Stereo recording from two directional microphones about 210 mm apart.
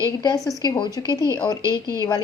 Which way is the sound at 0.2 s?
15° left (ahead or behind).